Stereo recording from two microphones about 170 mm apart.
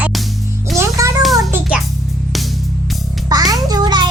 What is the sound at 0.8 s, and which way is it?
Music, 20° right (ahead or behind).